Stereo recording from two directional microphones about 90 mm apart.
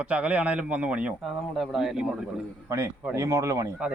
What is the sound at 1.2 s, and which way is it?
Speech, centre (ahead or behind).